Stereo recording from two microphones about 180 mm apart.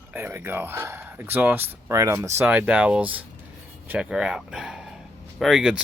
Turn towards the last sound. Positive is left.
turn(degrees=0)  # may be behind; listen again after turning